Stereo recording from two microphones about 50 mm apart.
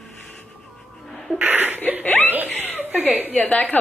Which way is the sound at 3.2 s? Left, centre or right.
Left.